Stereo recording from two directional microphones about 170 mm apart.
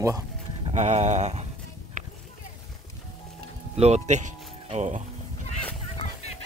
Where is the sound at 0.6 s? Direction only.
40° right (ahead or behind).